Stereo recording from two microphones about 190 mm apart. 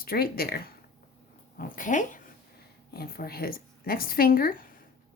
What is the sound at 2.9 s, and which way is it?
Speech, 55° left (ahead or behind).